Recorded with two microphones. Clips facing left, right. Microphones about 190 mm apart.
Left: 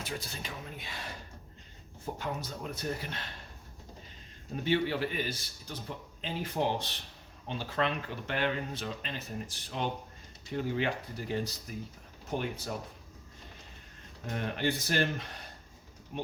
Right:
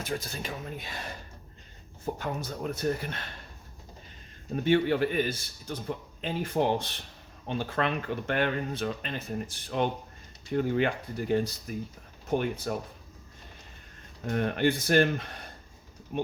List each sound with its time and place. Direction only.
0.0 s speech: 45° right (ahead or behind)
2.1 s speech: 50° right (ahead or behind)
4.5 s speech: 50° right (ahead or behind)
14.3 s speech: 55° right (ahead or behind)